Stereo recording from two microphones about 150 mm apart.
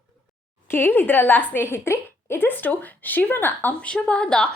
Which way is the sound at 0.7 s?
15° left (ahead or behind).